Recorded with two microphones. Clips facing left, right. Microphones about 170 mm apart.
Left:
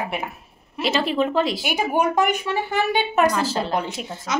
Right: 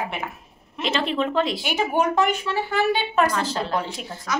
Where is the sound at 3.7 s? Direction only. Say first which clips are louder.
Left 2 dB; 20° left (ahead or behind).